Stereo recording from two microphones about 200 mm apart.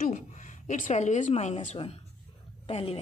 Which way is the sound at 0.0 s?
40° left (ahead or behind).